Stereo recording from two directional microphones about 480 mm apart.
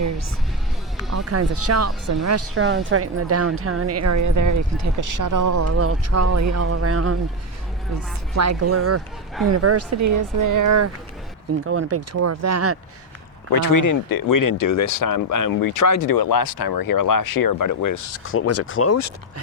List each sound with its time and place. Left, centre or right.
0.9 s speech: right
8.3 s speech: right
13.5 s speech: left